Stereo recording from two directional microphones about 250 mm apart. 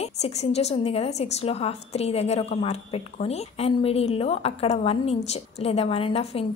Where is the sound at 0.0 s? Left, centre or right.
Left.